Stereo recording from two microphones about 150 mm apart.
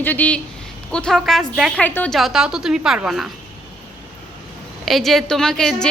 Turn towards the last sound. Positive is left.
turn(degrees=5)  # may be behind; listen again after turning